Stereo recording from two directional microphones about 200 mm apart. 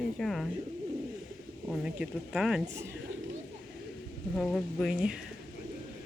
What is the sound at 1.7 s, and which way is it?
Speech, 5° right (ahead or behind).